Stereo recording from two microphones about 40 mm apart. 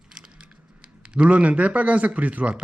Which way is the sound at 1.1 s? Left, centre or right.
Right.